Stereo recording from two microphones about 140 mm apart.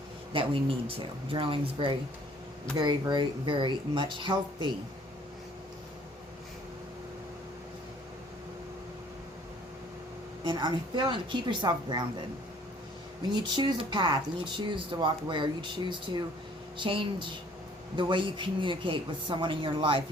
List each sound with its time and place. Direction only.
0.3 s speech: 40° right (ahead or behind)
10.4 s speech: 35° right (ahead or behind)
13.3 s speech: 35° right (ahead or behind)